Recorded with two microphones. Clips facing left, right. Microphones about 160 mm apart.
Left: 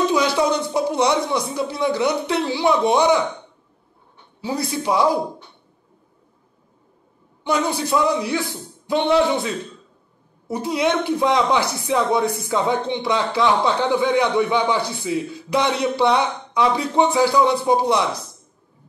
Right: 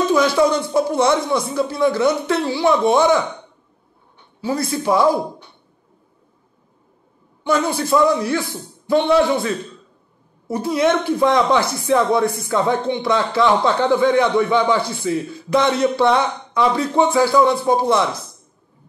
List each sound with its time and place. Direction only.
0.1 s speech: 15° left (ahead or behind)
4.6 s speech: 15° left (ahead or behind)
7.4 s speech: 15° left (ahead or behind)
10.5 s speech: 15° left (ahead or behind)